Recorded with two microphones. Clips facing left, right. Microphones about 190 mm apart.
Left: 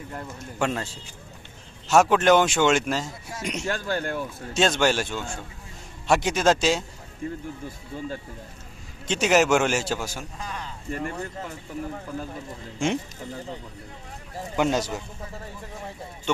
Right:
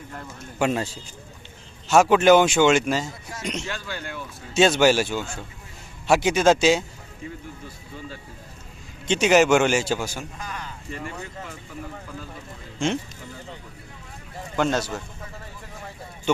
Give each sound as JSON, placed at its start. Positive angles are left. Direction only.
{"t": 0.6, "sound": "a man's voice", "side_deg": -10}
{"t": 1.9, "sound": "speech", "side_deg": 0}
{"t": 3.7, "sound": "speech", "side_deg": 45}
{"t": 4.5, "sound": "speech", "side_deg": -5}
{"t": 7.2, "sound": "speech", "side_deg": 50}
{"t": 9.0, "sound": "speech", "side_deg": 0}
{"t": 10.4, "sound": "speech", "side_deg": 30}
{"t": 10.9, "sound": "speech", "side_deg": 50}
{"t": 14.5, "sound": "speech", "side_deg": 10}